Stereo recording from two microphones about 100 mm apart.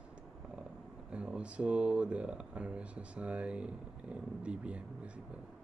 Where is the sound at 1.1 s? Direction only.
10° right (ahead or behind).